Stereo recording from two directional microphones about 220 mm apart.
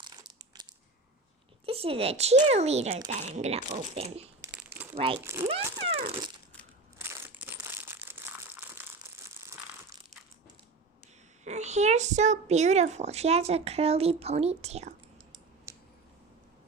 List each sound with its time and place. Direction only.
1.6 s a child's voice: 25° right (ahead or behind)
4.4 s crumpling: 10° right (ahead or behind)
4.9 s a child's voice: 25° right (ahead or behind)
5.2 s speech: 10° right (ahead or behind)
5.5 s a child's voice: 25° right (ahead or behind)
7.0 s crumpling: 10° right (ahead or behind)
11.4 s a child's voice: 30° right (ahead or behind)